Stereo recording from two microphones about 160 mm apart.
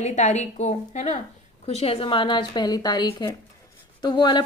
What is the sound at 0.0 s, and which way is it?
A woman's voice, 45° left (ahead or behind).